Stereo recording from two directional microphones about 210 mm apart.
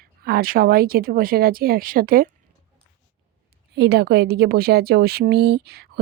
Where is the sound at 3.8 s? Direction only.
50° right (ahead or behind).